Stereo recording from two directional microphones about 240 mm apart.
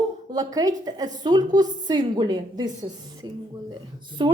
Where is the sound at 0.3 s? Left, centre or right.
Centre.